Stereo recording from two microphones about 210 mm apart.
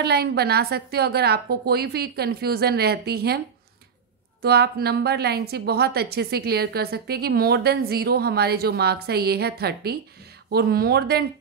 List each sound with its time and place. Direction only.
0.0 s a woman's voice: 50° right (ahead or behind)
4.4 s a woman's voice: 50° right (ahead or behind)